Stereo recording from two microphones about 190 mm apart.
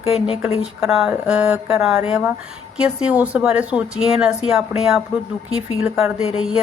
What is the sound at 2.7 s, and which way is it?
Speech, 5° right (ahead or behind).